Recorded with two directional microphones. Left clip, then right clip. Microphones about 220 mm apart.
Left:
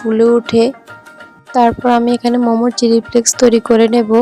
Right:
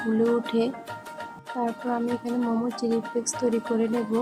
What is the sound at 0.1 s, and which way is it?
Speech, 35° left (ahead or behind).